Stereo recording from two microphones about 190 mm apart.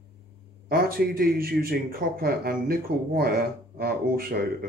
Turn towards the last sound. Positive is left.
turn(degrees=-50)  # may be behind; listen again after turning